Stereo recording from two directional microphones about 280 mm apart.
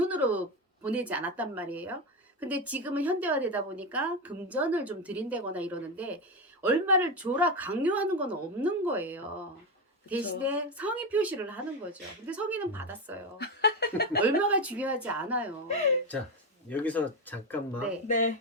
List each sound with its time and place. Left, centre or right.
0.1 s a sound: centre
0.9 s speech: centre
13.4 s speech: left
14.2 s speech: centre
16.6 s speech: centre
18.1 s speech: left